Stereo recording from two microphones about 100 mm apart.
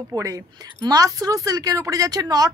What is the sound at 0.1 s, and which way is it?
Speech, 35° right (ahead or behind).